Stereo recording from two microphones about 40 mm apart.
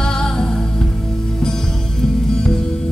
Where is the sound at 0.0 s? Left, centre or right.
Centre.